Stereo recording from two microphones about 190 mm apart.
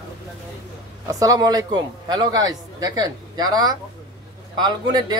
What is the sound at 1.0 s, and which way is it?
A man's voice, 20° right (ahead or behind).